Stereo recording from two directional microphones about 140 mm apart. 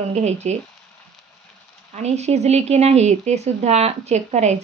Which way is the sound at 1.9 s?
50° right (ahead or behind).